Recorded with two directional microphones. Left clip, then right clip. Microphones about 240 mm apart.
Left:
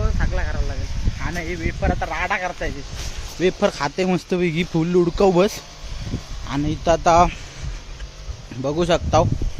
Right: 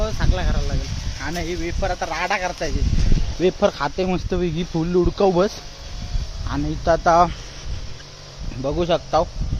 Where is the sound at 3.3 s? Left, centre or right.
Centre.